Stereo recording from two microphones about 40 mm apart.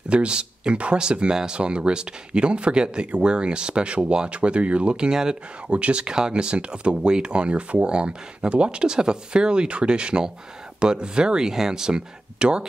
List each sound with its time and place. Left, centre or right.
0.1 s speech: right
5.1 s speech: centre
5.7 s speech: right